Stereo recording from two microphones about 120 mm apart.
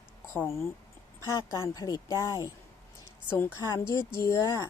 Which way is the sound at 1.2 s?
25° left (ahead or behind).